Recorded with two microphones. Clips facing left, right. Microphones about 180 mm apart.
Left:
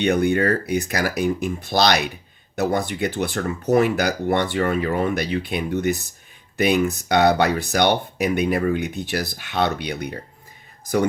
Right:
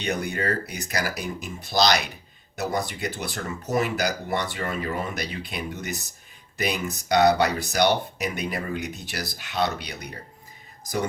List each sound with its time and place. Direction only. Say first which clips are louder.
0.0 s speech: left 9 dB; 60° left (ahead or behind)